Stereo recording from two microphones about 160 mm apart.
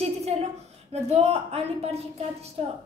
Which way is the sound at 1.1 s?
40° right (ahead or behind).